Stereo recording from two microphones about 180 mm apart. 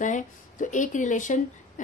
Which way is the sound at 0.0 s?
45° left (ahead or behind).